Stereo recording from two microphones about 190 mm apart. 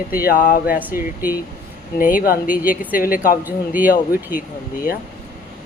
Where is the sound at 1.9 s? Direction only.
45° left (ahead or behind).